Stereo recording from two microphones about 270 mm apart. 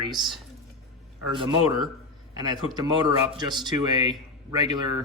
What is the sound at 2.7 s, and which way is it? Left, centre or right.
Speech, centre.